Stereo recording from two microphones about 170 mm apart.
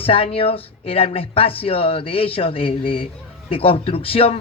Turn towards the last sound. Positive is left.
turn(degrees=35)  # may be behind; listen again after turning